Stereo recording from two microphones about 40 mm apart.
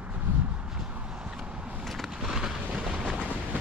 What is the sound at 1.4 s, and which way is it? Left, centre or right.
Vehicle, right.